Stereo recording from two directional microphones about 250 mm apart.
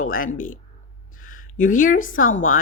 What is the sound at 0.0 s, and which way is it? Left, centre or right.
Speech, left.